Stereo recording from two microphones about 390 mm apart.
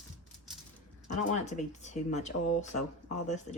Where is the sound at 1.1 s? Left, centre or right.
Centre.